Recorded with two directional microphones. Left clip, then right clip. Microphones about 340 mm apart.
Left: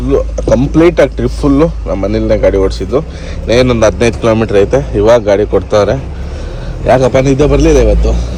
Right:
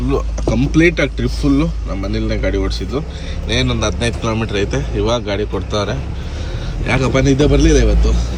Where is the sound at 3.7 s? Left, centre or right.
Left.